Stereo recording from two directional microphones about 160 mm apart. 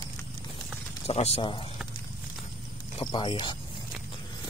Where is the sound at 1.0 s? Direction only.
40° left (ahead or behind).